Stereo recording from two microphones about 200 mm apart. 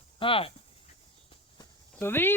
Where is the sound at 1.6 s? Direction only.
10° left (ahead or behind).